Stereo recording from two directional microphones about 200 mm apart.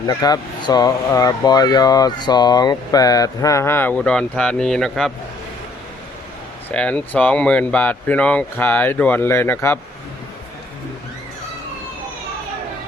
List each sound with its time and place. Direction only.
0.1 s speech: 20° left (ahead or behind); by 5.1 s centre (ahead or behind)
6.7 s speech: 5° left (ahead or behind)